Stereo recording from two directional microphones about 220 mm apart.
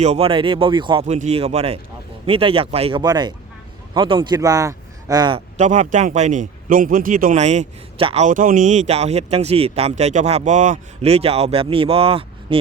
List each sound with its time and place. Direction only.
0.0 s a man's voice: 30° right (ahead or behind)
5.5 s a man's voice: 30° right (ahead or behind)